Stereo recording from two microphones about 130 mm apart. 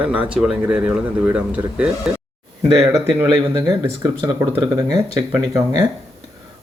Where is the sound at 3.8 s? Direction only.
25° right (ahead or behind).